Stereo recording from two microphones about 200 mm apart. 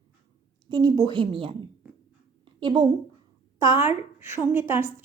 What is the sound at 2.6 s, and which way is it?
A woman's voice, 25° right (ahead or behind).